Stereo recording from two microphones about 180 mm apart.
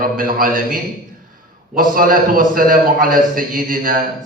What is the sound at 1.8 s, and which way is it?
A man's voice, 50° right (ahead or behind).